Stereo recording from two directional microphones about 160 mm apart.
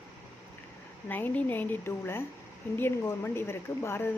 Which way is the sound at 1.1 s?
10° left (ahead or behind).